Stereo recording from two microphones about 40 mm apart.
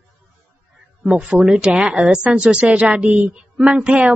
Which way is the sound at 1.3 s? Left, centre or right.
Right.